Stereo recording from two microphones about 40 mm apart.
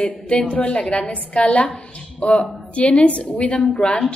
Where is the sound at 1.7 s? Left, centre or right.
Left.